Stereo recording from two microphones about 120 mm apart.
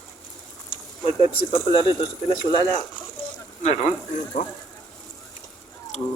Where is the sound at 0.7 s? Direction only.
50° left (ahead or behind).